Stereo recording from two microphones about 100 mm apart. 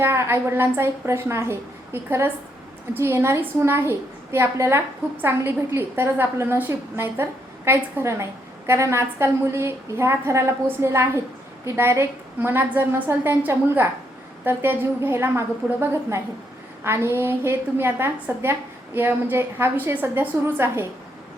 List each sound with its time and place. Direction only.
0.0 s a woman's voice: 25° right (ahead or behind)